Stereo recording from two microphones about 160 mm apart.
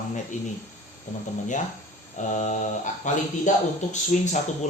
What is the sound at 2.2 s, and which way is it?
Speech, 50° left (ahead or behind).